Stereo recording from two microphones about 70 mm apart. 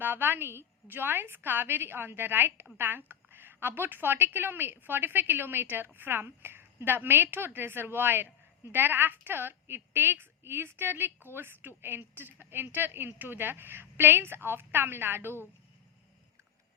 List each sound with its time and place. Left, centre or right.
0.0 s a woman's voice: right